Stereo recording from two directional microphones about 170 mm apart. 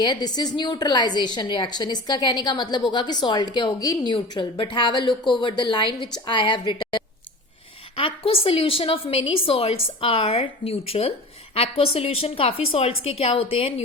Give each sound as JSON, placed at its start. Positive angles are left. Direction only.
{"t": 0.0, "sound": "a woman's voice", "side_deg": 25}